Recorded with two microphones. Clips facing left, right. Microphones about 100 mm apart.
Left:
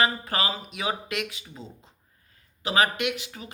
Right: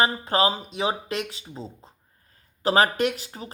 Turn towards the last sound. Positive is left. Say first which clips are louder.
# right 4 dB
turn(degrees=-35)  # may be behind; listen again after turning